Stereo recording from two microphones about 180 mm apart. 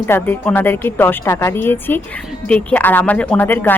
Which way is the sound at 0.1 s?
10° left (ahead or behind).